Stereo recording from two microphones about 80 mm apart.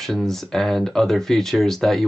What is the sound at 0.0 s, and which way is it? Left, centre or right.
Speech, centre.